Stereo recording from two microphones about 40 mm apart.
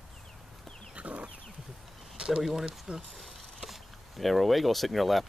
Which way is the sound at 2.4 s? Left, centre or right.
Centre.